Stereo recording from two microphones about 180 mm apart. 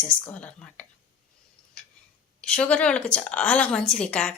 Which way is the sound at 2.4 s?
5° left (ahead or behind).